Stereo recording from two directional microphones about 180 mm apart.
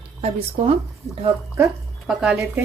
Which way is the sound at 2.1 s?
5° right (ahead or behind).